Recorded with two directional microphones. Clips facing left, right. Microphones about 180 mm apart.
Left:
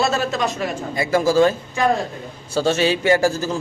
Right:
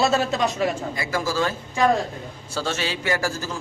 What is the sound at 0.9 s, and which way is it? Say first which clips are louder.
Speech: left 8 dB; 25° left (ahead or behind).